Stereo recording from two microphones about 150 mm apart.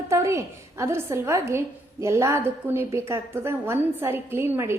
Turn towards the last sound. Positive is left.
turn(degrees=-15)  # may be behind; listen again after turning